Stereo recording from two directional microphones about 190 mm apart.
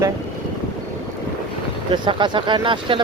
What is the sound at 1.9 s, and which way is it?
Speech, 25° right (ahead or behind).